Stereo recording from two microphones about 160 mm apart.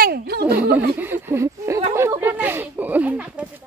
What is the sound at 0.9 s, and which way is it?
Speech, 15° right (ahead or behind).